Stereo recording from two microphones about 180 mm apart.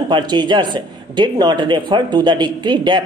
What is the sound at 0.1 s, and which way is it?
A man's voice, 25° right (ahead or behind).